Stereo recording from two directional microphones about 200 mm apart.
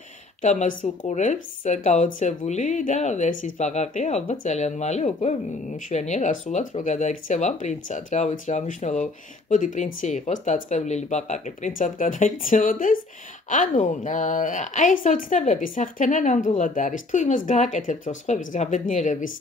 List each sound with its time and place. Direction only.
0.4 s a woman's voice: 35° left (ahead or behind)